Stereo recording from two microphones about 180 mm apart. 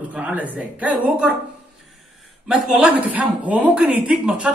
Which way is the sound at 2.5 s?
5° right (ahead or behind).